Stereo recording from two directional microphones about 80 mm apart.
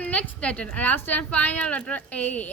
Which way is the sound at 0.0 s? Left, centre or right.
Centre.